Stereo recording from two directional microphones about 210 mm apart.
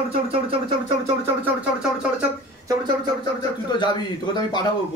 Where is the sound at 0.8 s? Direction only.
25° right (ahead or behind).